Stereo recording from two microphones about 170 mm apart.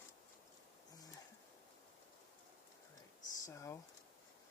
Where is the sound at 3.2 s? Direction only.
20° left (ahead or behind).